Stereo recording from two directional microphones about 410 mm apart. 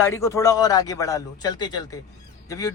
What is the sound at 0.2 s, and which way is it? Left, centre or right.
Speech, centre.